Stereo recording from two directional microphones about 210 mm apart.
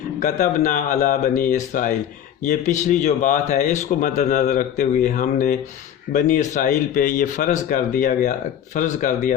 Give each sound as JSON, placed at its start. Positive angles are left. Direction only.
{"t": 0.2, "sound": "speech", "side_deg": 35}